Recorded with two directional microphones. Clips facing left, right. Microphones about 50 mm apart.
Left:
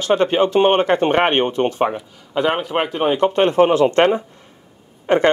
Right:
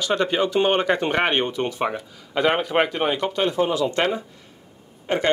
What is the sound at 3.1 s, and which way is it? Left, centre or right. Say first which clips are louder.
Speech: left 7 dB; left.